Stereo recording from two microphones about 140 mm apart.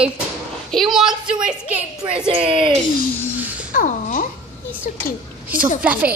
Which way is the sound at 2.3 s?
40° right (ahead or behind).